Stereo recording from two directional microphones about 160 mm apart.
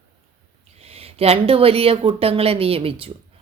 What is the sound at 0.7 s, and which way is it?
Speech, 40° right (ahead or behind).